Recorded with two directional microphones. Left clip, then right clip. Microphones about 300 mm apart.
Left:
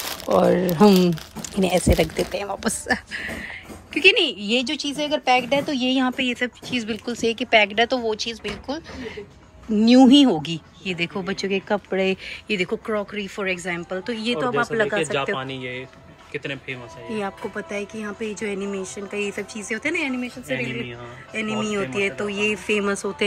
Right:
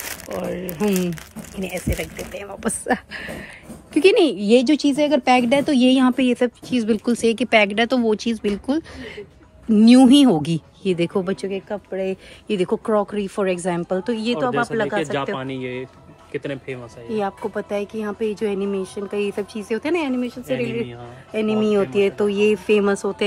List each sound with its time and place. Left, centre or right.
0.4 s speech: centre
2.3 s speech: centre
11.4 s speech: centre
15.3 s speech: right
17.1 s speech: centre